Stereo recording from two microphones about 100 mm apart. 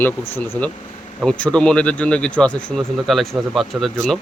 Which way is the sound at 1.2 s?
10° left (ahead or behind).